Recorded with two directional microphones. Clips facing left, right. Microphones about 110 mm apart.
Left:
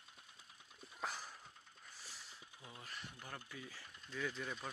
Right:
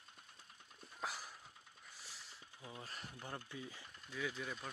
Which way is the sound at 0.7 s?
Centre (ahead or behind).